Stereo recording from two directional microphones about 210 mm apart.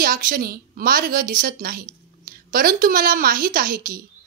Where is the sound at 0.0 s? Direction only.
45° right (ahead or behind).